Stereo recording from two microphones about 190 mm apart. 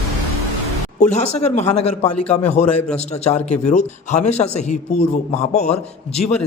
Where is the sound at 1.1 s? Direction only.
35° left (ahead or behind).